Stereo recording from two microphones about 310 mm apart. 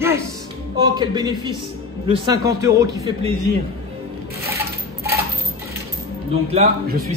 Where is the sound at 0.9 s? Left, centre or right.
Centre.